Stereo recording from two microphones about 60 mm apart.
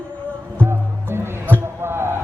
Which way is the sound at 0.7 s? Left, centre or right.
Right.